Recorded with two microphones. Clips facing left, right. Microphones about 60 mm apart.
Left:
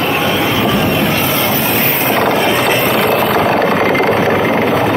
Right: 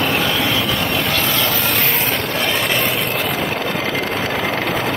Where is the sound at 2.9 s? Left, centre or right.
Left.